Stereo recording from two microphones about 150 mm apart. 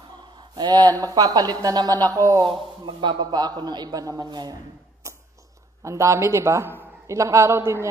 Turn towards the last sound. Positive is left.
turn(degrees=-15)  # may be behind; listen again after turning